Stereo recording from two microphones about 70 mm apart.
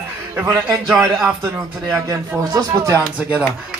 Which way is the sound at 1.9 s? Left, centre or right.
Right.